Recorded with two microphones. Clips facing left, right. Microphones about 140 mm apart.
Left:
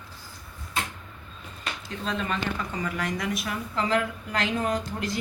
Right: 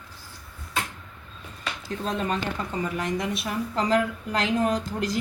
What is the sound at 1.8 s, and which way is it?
Speech, 40° right (ahead or behind).